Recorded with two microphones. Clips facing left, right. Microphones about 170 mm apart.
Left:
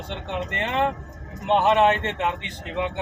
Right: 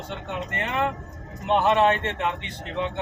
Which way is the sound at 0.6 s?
25° left (ahead or behind).